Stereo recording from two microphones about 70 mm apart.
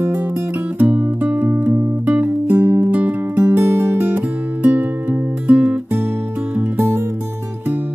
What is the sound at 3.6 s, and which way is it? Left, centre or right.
Music, right.